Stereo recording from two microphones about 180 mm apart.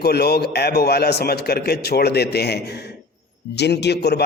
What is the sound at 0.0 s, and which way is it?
A man's voice, 60° left (ahead or behind).